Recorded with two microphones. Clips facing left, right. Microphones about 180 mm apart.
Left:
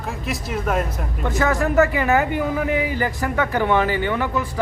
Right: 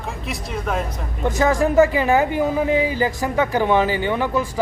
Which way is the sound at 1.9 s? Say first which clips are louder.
Right 2 dB; 25° right (ahead or behind).